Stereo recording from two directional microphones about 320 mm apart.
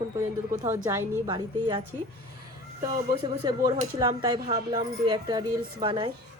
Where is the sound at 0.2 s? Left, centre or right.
Centre.